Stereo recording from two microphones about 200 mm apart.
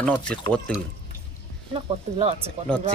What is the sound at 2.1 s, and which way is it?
Speech, 30° right (ahead or behind).